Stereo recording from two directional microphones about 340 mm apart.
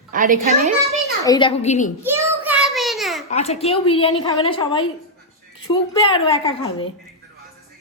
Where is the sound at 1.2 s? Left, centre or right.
Centre.